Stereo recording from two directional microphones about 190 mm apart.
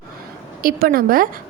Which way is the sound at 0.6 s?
50° right (ahead or behind).